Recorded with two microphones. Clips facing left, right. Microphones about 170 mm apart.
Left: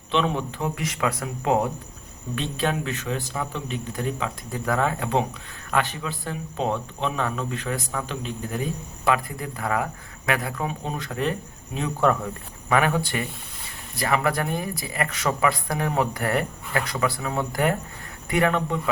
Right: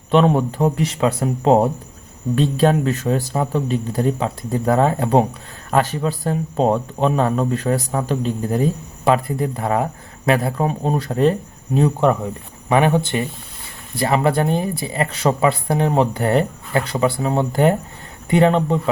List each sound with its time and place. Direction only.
0.1 s speech: 45° right (ahead or behind)
11.9 s speech: 20° right (ahead or behind)